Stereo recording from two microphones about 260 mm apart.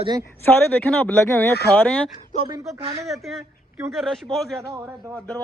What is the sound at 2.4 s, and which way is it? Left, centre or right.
Speech, centre.